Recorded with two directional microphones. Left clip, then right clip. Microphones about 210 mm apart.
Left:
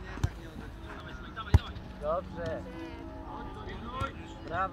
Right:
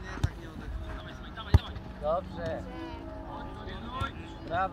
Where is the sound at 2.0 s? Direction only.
40° right (ahead or behind).